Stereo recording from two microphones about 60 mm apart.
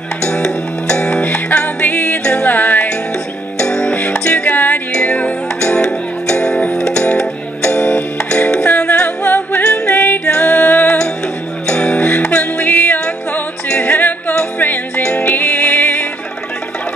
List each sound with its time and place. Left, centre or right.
0.2 s music: centre
3.5 s music: centre; by 9.6 s left
9.6 s music: centre
9.9 s music: left
10.2 s music: left